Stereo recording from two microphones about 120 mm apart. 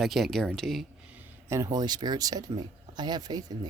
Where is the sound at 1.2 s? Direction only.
25° right (ahead or behind).